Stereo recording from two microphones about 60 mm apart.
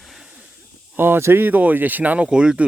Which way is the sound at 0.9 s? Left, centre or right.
Right.